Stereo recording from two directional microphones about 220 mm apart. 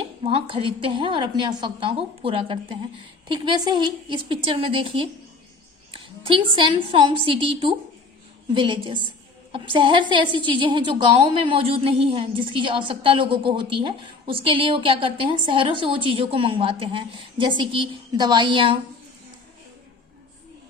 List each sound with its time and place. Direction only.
0.2 s a woman's voice: 25° right (ahead or behind)